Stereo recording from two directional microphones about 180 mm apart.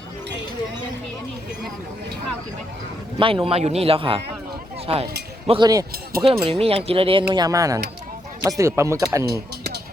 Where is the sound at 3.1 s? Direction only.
30° right (ahead or behind).